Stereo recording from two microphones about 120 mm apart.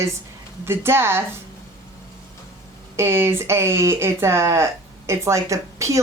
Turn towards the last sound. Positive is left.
turn(degrees=-25)  # may be behind; listen again after turning